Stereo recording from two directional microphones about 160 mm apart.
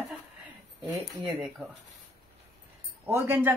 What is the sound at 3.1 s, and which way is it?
Speech, 15° right (ahead or behind).